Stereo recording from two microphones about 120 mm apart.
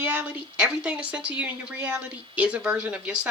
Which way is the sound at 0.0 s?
15° right (ahead or behind).